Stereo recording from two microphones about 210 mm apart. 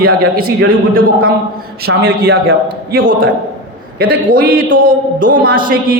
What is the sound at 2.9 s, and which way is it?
A man's voice, 45° right (ahead or behind).